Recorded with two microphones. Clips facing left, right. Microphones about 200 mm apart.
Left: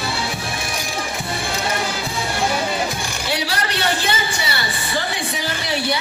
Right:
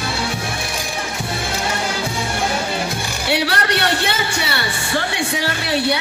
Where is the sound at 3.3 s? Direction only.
65° right (ahead or behind).